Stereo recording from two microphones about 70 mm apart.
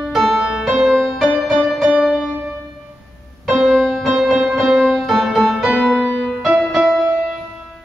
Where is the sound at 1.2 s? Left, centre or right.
Centre.